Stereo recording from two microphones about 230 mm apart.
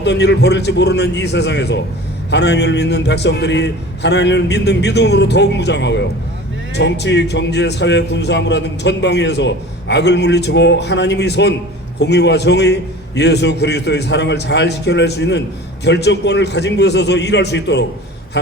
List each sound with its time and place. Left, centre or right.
0.0 s a man's voice: left